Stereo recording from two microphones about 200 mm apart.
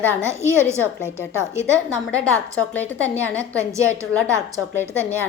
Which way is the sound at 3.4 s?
15° right (ahead or behind).